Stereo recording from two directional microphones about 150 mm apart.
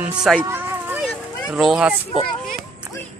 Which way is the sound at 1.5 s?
5° right (ahead or behind).